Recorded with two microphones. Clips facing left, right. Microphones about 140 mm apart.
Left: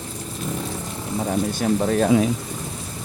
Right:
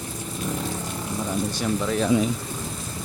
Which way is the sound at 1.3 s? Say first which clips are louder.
Left 5 dB; 50° left (ahead or behind).